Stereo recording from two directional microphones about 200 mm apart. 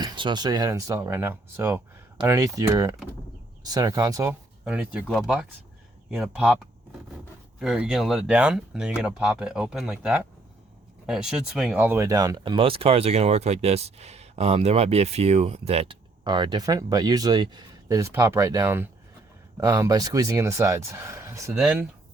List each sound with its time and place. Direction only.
0.0 s speech: 20° right (ahead or behind); by 6.6 s 5° right (ahead or behind)
7.6 s speech: 5° right (ahead or behind)
21.5 s speech: centre (ahead or behind)